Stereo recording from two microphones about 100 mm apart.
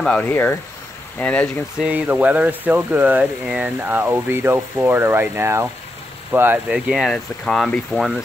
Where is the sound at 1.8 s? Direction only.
15° right (ahead or behind).